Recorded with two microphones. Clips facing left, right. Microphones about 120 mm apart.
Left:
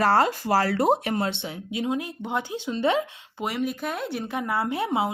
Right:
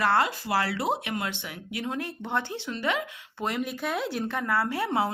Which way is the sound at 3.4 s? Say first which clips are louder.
Left 2 dB; centre (ahead or behind).